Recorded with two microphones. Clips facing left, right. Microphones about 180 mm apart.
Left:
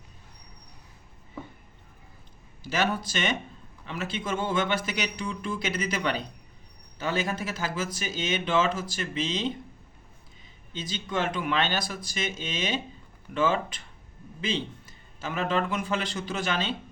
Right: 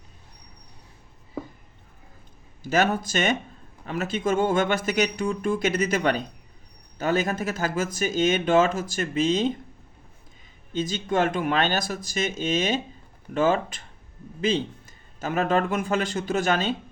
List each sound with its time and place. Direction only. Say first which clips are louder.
2.6 s speech: right 5 dB; 45° right (ahead or behind)
10.7 s speech: right 8 dB; 45° right (ahead or behind)